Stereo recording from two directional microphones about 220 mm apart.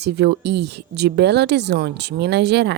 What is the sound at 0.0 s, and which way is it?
Speech, 50° right (ahead or behind).